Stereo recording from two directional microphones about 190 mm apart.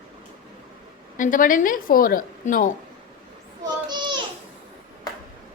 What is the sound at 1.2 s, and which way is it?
A woman's voice, 45° left (ahead or behind).